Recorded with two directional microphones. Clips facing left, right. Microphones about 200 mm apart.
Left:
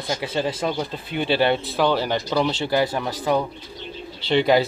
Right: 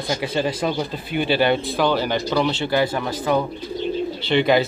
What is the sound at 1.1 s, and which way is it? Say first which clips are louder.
Speech: right 1 dB; 25° left (ahead or behind).